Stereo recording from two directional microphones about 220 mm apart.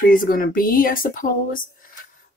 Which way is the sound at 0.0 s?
40° left (ahead or behind).